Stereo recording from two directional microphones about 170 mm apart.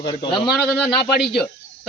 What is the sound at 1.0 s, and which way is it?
Speech, 75° left (ahead or behind).